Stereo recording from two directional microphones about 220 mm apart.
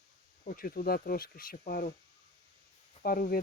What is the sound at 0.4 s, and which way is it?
Speech, 40° left (ahead or behind).